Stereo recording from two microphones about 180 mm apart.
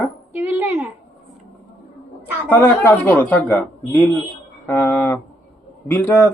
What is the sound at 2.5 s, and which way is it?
Speech, 10° left (ahead or behind).